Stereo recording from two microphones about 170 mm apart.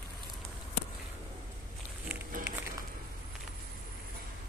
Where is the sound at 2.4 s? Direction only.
15° right (ahead or behind).